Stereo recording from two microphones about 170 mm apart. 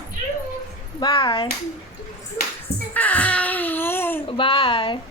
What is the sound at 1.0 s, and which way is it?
Speech, 30° left (ahead or behind).